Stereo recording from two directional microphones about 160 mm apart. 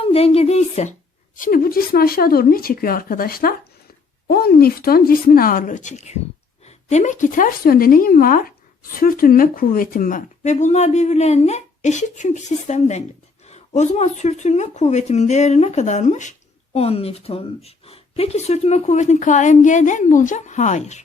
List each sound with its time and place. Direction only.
0.0 s a woman's voice: 40° left (ahead or behind)
1.4 s a woman's voice: 60° left (ahead or behind)
16.7 s a woman's voice: 40° left (ahead or behind)